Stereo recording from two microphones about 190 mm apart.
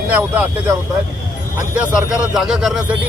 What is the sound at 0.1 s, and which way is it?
A man's voice, 10° right (ahead or behind).